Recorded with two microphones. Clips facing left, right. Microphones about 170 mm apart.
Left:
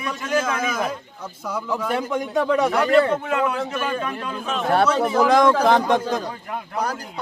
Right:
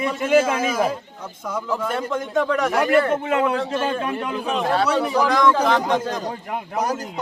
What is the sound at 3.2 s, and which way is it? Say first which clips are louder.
A man's voice: right 2 dB; 25° right (ahead or behind).